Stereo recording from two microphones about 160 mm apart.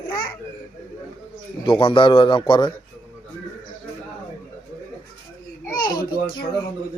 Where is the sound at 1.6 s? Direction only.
35° left (ahead or behind).